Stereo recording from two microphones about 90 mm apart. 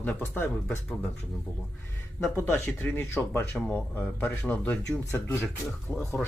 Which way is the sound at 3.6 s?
15° left (ahead or behind).